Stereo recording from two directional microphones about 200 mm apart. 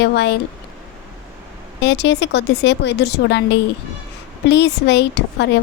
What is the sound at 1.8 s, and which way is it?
A woman's voice, 60° left (ahead or behind).